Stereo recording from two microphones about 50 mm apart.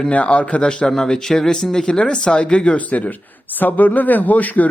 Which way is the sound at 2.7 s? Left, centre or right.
Left.